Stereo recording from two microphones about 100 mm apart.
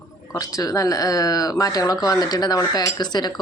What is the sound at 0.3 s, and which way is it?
Speech, 35° left (ahead or behind).